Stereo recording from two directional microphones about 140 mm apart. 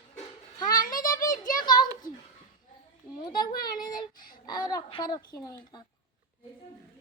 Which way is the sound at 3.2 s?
30° left (ahead or behind).